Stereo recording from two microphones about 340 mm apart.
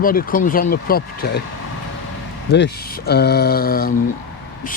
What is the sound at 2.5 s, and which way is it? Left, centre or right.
Speech, left.